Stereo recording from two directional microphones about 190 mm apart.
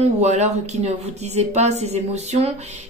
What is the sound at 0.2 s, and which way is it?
Speech, 35° right (ahead or behind).